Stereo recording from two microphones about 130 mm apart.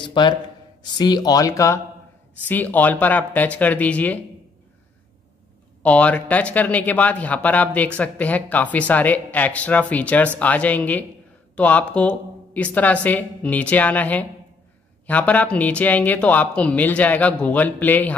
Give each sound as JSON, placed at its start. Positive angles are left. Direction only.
{"t": 0.0, "sound": "a man's voice", "side_deg": 35}
{"t": 2.4, "sound": "speech", "side_deg": 15}
{"t": 5.8, "sound": "speech", "side_deg": 10}